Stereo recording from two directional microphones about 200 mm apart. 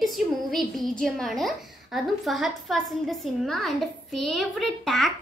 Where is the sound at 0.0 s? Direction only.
Centre (ahead or behind).